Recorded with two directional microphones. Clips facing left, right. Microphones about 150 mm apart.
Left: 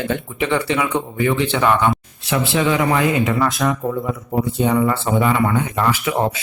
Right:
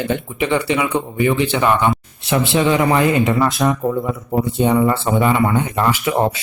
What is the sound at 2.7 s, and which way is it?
A man's voice, 30° right (ahead or behind).